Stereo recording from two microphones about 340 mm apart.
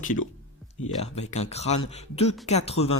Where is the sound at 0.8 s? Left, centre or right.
Centre.